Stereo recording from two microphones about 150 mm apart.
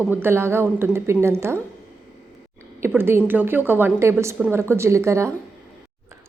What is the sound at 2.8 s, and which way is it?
A woman's voice, 15° right (ahead or behind).